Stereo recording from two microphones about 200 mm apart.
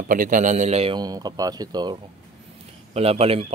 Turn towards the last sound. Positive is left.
turn(degrees=-30)  # may be behind; listen again after turning